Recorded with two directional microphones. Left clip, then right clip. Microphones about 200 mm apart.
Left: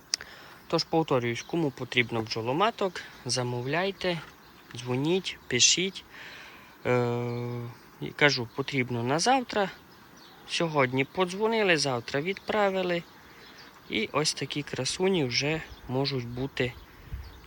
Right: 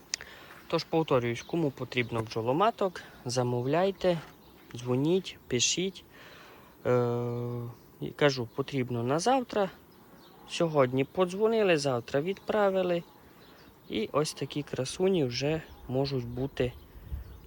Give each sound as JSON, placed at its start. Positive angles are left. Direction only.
{"t": 0.1, "sound": "speech", "side_deg": 5}